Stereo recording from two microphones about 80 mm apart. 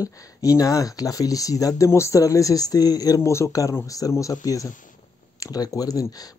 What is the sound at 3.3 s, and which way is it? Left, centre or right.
Speech, left.